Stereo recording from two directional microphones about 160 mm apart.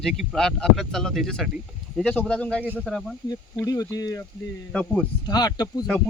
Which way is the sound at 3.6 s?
20° left (ahead or behind).